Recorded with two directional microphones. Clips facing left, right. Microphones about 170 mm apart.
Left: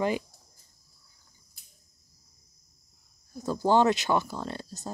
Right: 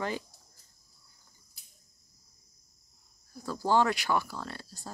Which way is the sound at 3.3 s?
20° left (ahead or behind).